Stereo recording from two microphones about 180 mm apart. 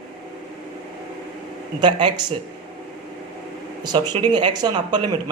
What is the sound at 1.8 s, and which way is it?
Speech, 25° right (ahead or behind).